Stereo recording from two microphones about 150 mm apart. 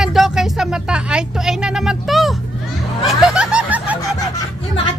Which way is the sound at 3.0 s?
5° right (ahead or behind).